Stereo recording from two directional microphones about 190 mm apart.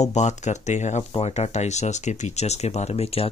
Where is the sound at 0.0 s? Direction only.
40° left (ahead or behind).